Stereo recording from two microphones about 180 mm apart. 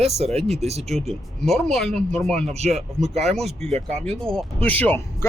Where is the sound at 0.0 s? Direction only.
35° right (ahead or behind).